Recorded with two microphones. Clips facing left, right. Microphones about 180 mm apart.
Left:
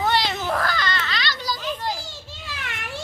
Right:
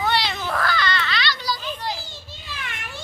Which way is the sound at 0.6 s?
40° left (ahead or behind).